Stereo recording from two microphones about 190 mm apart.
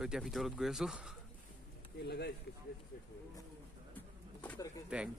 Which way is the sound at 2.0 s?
60° left (ahead or behind).